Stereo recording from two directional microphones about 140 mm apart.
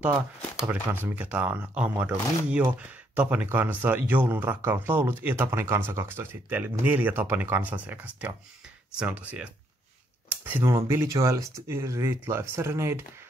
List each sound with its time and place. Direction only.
1.0 s speech: 10° right (ahead or behind)